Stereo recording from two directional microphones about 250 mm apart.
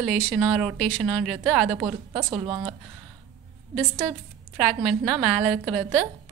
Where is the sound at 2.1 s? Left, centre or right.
Centre.